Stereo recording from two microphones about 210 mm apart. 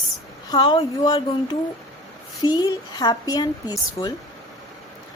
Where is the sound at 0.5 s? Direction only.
20° left (ahead or behind).